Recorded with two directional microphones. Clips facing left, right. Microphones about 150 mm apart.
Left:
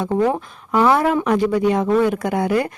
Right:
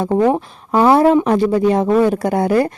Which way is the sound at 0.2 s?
25° right (ahead or behind).